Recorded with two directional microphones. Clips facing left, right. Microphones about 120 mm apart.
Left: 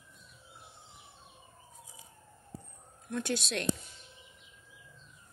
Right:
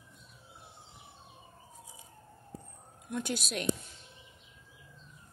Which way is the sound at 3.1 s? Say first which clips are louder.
Left 1 dB; 5° right (ahead or behind).